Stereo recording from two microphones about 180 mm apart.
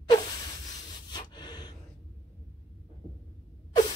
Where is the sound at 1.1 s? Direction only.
25° left (ahead or behind).